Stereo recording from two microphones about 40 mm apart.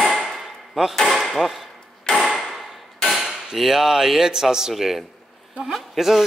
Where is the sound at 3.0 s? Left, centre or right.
Centre.